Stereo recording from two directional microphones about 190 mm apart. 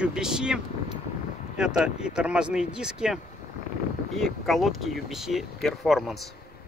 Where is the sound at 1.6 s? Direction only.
5° right (ahead or behind).